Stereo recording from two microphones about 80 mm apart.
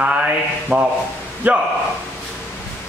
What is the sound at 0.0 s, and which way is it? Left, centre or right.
Mantra, centre.